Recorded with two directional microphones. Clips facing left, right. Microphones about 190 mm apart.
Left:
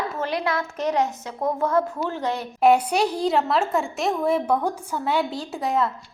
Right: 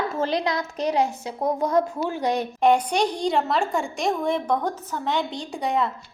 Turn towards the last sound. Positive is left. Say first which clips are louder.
# left 1 dB
turn(degrees=0)  # may be behind; listen again after turning